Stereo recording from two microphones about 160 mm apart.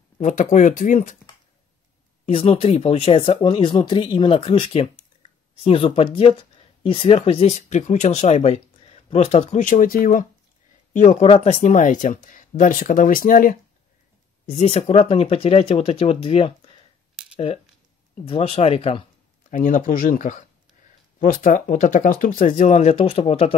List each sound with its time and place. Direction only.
0.2 s speech: 50° left (ahead or behind)
2.2 s speech: 35° left (ahead or behind)
7.5 s speech: 50° left (ahead or behind)
11.0 s speech: 50° left (ahead or behind)
14.6 s speech: 40° left (ahead or behind)
18.2 s speech: 35° left (ahead or behind)
19.5 s speech: 55° left (ahead or behind)
22.7 s speech: 45° left (ahead or behind)